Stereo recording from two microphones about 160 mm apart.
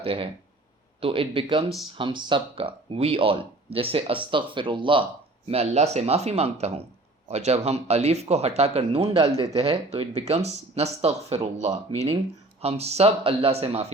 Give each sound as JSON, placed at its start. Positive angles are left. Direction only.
{"t": 0.0, "sound": "speech", "side_deg": -35}